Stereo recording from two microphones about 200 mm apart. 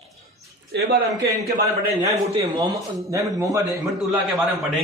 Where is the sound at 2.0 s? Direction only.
20° right (ahead or behind).